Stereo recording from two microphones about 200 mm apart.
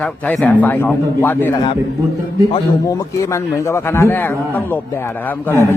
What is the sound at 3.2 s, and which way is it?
A man's voice, 15° left (ahead or behind).